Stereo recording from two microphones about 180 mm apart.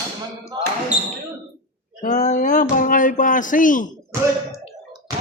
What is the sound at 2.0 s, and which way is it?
Speech, 45° left (ahead or behind).